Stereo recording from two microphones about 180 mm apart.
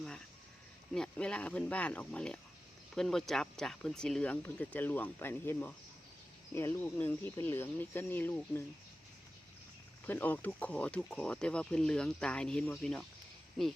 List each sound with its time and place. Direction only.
0.9 s speech: 5° left (ahead or behind)
10.1 s speech: 10° left (ahead or behind)